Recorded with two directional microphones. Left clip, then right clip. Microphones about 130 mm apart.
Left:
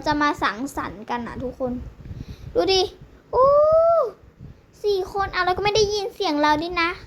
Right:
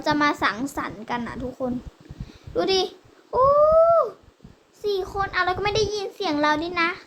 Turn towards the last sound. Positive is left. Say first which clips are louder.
# left 1 dB
turn(degrees=25)  # may be behind; listen again after turning